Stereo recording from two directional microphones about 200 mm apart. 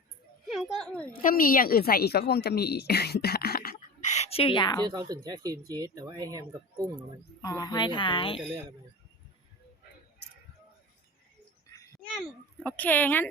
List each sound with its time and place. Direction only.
0.5 s speech: centre (ahead or behind)
1.2 s a woman's voice: 45° left (ahead or behind); by 4.8 s 25° left (ahead or behind)
4.9 s speech: 20° right (ahead or behind)
7.4 s a woman's voice: 20° left (ahead or behind)
12.1 s a child's voice: 5° left (ahead or behind)